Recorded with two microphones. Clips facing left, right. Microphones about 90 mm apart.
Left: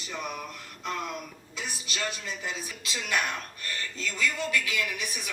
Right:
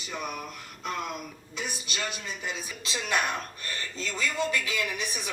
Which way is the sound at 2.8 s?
25° right (ahead or behind).